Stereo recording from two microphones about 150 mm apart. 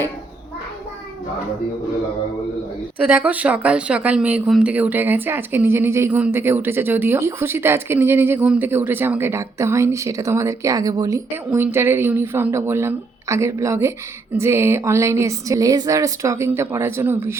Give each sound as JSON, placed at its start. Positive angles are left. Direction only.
{"t": 3.0, "sound": "speech", "side_deg": -15}